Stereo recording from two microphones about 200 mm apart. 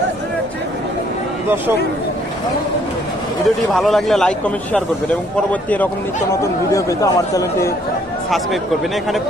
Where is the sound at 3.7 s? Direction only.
Centre (ahead or behind); by 7.7 s 15° left (ahead or behind).